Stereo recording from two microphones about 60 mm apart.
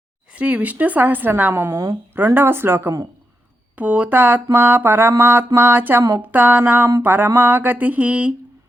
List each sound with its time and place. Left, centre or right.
0.3 s a woman's voice: right
2.1 s mantra: right
3.8 s a woman's voice: right
4.5 s mantra: right
6.2 s a woman's voice: right
7.0 s mantra: right
7.3 s a woman's voice: right